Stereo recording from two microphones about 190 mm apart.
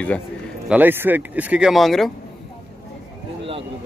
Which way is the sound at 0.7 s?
10° right (ahead or behind).